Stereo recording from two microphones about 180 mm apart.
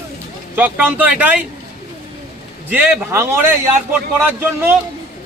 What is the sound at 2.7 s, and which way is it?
Speech, 10° right (ahead or behind).